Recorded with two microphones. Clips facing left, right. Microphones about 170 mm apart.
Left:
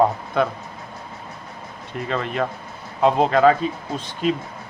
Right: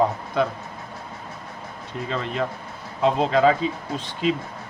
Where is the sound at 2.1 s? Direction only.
60° left (ahead or behind).